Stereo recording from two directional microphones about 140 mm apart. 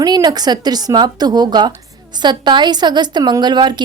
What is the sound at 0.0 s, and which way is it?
A woman's voice, 30° right (ahead or behind).